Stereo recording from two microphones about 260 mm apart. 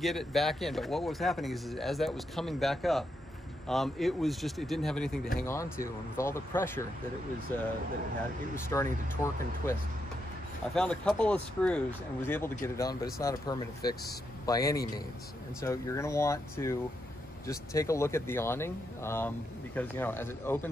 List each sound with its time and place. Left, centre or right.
0.0 s a man's voice: centre